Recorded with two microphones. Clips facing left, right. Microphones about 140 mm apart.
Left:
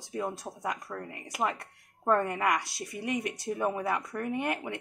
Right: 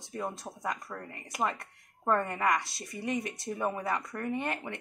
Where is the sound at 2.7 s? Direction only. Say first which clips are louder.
Left 3 dB; 65° left (ahead or behind).